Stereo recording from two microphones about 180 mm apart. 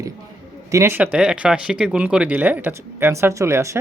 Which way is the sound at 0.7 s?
15° right (ahead or behind).